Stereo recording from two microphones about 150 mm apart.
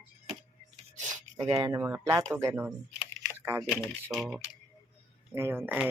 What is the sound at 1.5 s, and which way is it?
Speech, 25° right (ahead or behind).